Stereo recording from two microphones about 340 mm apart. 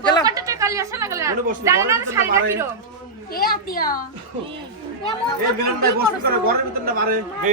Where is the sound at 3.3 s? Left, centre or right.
Left.